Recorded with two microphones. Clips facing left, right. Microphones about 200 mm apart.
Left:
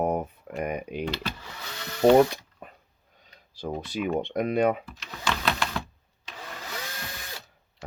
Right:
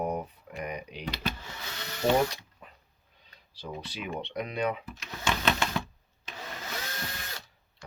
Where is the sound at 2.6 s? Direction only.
50° left (ahead or behind).